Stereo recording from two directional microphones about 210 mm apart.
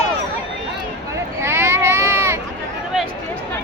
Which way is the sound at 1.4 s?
10° right (ahead or behind).